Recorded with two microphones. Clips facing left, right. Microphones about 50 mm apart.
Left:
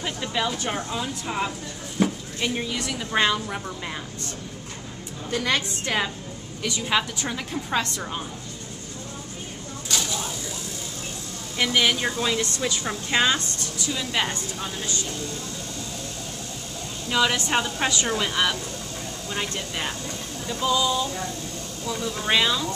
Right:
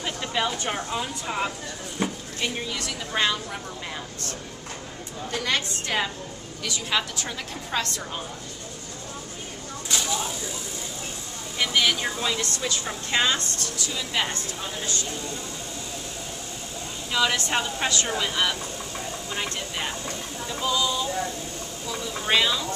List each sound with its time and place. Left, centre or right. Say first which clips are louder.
0.0 s speech: even; centre
2.0 s a sound: left 4 dB; centre
2.9 s a woman's voice: left 3 dB; centre
5.3 s a woman's voice: left 2 dB; centre
9.8 s a sound: even; centre
11.5 s a woman's voice: left 1 dB; centre
12.4 s speech: left 2 dB; left
13.1 s a woman's voice: left 2 dB; centre
17.1 s a woman's voice: left 2 dB; centre
18.0 s speech: left 2 dB; centre